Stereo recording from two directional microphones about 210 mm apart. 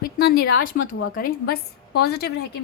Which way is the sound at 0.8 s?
65° left (ahead or behind).